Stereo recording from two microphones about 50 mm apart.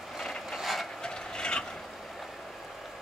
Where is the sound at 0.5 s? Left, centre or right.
Centre.